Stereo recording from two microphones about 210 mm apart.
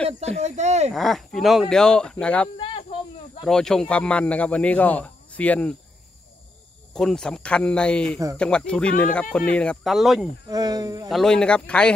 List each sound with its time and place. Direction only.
0.0 s speech: 30° right (ahead or behind)
0.9 s speech: centre (ahead or behind)
2.5 s a sound: 25° left (ahead or behind)
3.4 s speech: 5° left (ahead or behind)
6.9 s speech: centre (ahead or behind)
10.5 s speech: 20° right (ahead or behind)
11.1 s speech: centre (ahead or behind)